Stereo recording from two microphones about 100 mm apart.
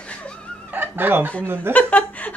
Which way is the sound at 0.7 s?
20° right (ahead or behind).